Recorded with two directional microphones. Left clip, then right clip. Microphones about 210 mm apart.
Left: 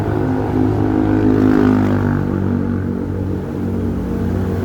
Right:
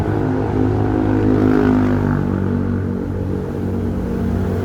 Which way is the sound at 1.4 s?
45° left (ahead or behind).